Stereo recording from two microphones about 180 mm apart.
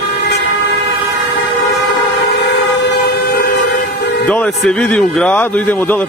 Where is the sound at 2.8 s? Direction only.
55° left (ahead or behind).